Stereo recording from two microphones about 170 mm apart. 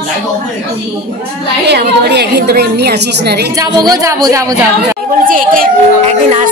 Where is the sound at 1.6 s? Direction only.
75° right (ahead or behind).